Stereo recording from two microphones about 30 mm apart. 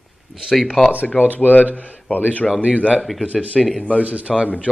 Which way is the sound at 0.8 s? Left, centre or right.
Centre.